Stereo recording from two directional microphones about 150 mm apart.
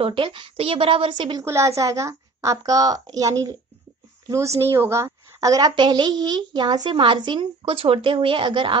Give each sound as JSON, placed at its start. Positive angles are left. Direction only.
{"t": 0.0, "sound": "a woman's voice", "side_deg": -35}
{"t": 1.4, "sound": "a woman's voice", "side_deg": -20}